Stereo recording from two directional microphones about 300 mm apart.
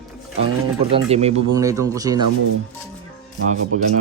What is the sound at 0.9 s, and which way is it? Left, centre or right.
Speech, right.